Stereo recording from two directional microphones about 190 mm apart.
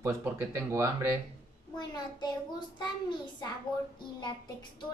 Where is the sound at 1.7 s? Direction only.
25° left (ahead or behind).